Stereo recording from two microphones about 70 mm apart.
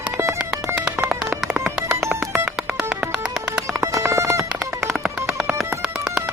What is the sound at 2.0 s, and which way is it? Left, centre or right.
Music, right.